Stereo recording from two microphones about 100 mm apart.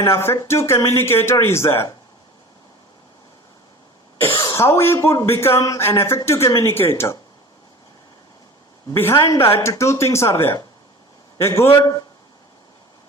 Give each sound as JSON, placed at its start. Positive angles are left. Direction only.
{"t": 0.0, "sound": "speech", "side_deg": 25}
{"t": 4.5, "sound": "speech", "side_deg": 25}
{"t": 9.0, "sound": "speech", "side_deg": 25}
{"t": 11.8, "sound": "speech", "side_deg": 40}